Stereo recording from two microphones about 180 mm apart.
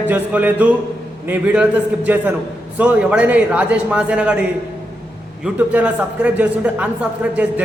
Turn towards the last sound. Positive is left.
turn(degrees=-5)  # may be behind; listen again after turning